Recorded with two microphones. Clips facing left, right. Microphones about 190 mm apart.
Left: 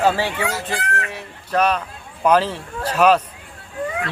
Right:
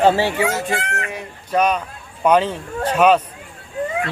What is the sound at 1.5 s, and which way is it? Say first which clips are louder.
Speech: right 1 dB; 5° right (ahead or behind).